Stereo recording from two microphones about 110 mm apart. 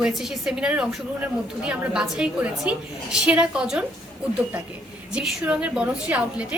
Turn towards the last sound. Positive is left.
turn(degrees=-10)  # may be behind; listen again after turning